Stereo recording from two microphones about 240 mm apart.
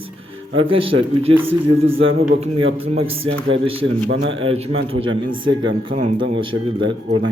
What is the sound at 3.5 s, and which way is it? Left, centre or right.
Speech, right.